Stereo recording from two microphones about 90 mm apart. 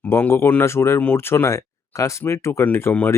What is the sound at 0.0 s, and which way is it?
Speech, 20° left (ahead or behind).